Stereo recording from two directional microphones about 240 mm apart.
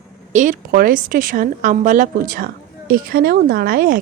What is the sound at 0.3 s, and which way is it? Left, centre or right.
A woman's voice, right.